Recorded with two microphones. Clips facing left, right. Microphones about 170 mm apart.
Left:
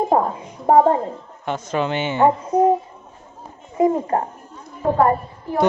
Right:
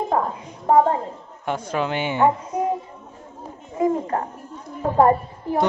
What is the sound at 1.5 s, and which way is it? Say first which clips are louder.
Speech: left 2 dB; 10° right (ahead or behind).